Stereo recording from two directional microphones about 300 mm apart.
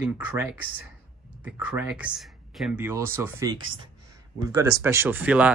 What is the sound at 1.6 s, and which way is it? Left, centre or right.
Speech, centre.